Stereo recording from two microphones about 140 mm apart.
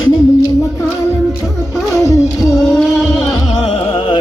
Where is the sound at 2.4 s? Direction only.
5° right (ahead or behind).